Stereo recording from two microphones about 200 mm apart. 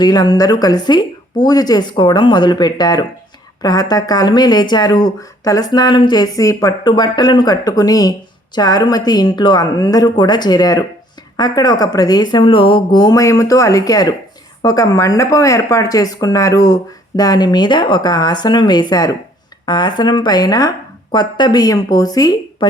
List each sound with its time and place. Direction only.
0.0 s speech: 20° left (ahead or behind)